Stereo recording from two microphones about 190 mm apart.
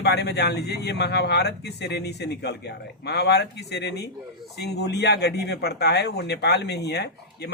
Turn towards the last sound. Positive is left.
turn(degrees=60)  # may be behind; listen again after turning